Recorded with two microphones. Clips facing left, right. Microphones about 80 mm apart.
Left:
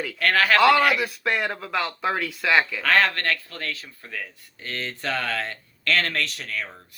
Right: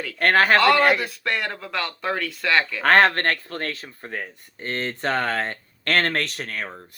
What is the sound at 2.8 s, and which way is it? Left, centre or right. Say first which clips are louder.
Speech: right 4 dB; right.